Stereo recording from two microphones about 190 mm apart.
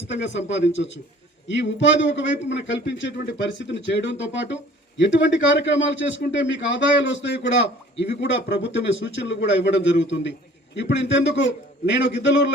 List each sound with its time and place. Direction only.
0.3 s a man's voice: 70° left (ahead or behind)